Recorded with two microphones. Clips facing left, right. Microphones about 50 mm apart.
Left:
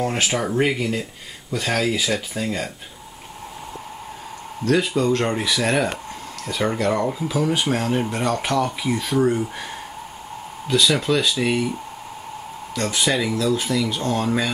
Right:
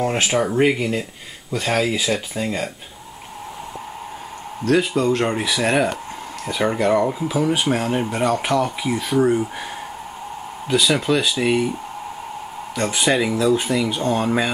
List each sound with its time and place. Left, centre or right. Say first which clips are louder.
0.0 s speech: right 3 dB; centre
4.6 s speech: right 1 dB; centre
10.7 s speech: right 1 dB; centre
12.7 s speech: right 2 dB; centre